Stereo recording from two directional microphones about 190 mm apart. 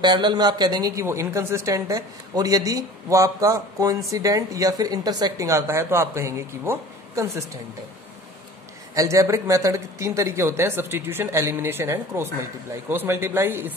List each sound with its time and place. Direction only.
0.0 s a woman's voice: 25° right (ahead or behind)
8.9 s a woman's voice: 15° right (ahead or behind)